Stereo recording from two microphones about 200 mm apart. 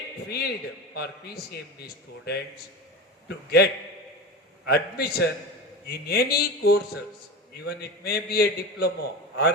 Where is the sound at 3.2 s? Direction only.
55° left (ahead or behind).